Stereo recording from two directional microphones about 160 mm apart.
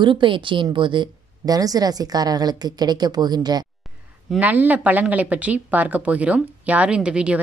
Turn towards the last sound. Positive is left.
turn(degrees=-5)  # may be behind; listen again after turning